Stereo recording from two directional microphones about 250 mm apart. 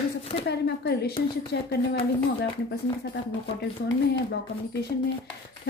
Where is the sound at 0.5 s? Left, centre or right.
Left.